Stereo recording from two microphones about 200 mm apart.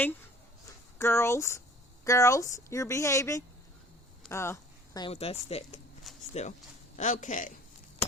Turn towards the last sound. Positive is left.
turn(degrees=40)  # may be behind; listen again after turning